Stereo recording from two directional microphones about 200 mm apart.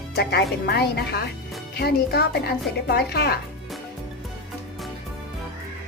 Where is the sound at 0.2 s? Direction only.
55° left (ahead or behind).